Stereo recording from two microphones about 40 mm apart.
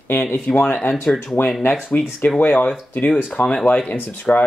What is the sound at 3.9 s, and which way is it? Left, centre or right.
Speech, left.